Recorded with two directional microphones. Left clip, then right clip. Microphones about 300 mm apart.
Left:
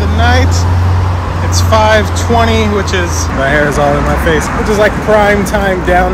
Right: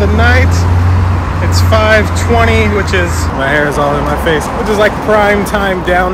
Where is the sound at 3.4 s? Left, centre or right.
Centre.